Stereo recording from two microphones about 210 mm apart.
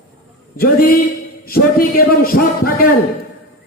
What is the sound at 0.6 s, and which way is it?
A man's voice, 45° left (ahead or behind).